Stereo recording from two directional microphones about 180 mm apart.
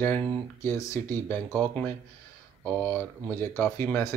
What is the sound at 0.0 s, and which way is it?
Speech, 10° left (ahead or behind).